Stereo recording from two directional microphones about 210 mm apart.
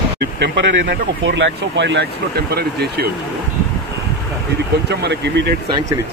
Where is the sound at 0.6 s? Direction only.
55° right (ahead or behind).